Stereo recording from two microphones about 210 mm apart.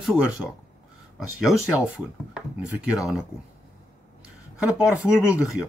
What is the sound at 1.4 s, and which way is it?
Speech, centre (ahead or behind).